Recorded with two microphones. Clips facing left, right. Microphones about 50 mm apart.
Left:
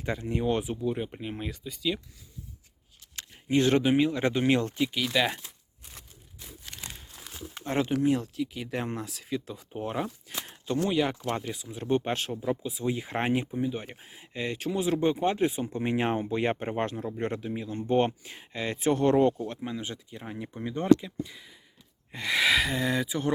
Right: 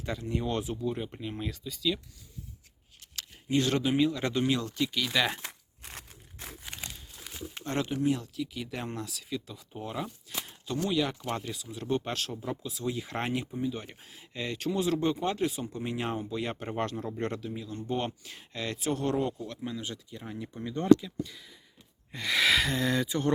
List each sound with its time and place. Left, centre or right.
0.0 s speech: left
1.5 s speech: centre
3.2 s speech: left
4.4 s speech: left
4.8 s speech: centre
5.0 s speech: centre
5.4 s crumpling: right
7.6 s speech: centre
8.2 s speech: left
11.3 s speech: centre
18.9 s speech: left
19.5 s speech: left; by 23.3 s centre